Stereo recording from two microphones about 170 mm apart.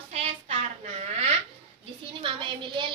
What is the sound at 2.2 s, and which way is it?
Speech, 30° right (ahead or behind).